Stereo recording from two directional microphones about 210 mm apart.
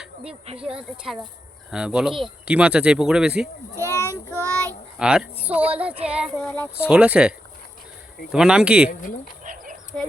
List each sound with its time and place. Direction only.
0.0 s a sound: 5° right (ahead or behind)
0.6 s speech: 5° right (ahead or behind)
4.3 s child singing: 5° left (ahead or behind)
4.9 s speech: 5° right (ahead or behind)
6.8 s speech: 5° right (ahead or behind)
8.9 s speech: 40° left (ahead or behind)
9.4 s chicken: 40° right (ahead or behind)
9.9 s speech: 5° left (ahead or behind)